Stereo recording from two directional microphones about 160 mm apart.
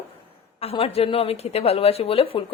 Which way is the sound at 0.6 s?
40° left (ahead or behind).